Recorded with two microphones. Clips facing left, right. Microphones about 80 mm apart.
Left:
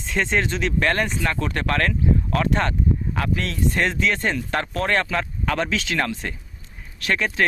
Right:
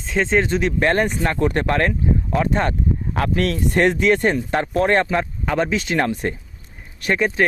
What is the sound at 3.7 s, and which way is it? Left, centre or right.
Speech, right.